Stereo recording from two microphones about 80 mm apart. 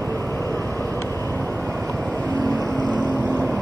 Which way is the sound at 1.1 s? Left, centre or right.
Left.